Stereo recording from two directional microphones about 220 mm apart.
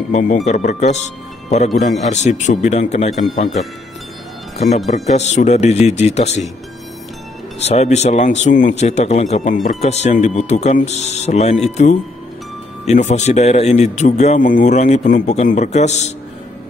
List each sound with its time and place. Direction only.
0.1 s a man's voice: 35° left (ahead or behind)
7.6 s a man's voice: 30° left (ahead or behind)